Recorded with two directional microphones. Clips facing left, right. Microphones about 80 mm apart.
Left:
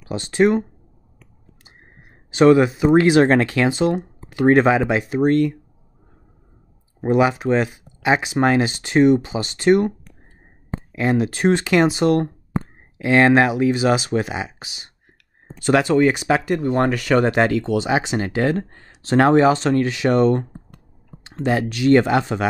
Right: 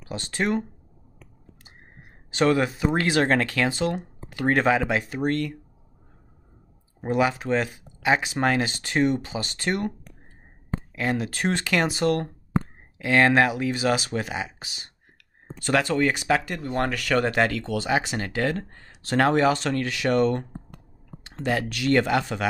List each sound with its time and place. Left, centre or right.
0.1 s speech: centre
2.3 s speech: centre
7.1 s speech: left